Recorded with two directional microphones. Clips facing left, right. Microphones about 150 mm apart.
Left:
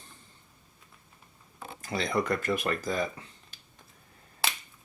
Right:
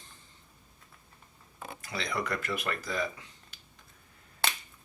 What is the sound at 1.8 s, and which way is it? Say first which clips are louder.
Speech: left 5 dB; 40° left (ahead or behind).